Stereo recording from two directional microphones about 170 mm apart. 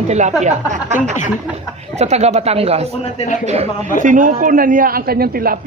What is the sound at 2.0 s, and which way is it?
Speech, 40° right (ahead or behind).